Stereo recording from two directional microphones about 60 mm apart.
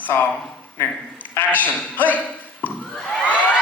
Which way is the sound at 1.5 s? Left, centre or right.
Left.